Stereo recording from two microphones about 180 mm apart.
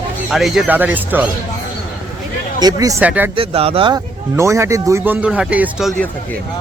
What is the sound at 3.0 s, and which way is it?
Speech, 10° right (ahead or behind).